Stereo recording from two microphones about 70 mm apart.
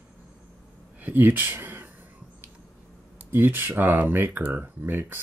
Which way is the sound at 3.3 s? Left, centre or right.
Right.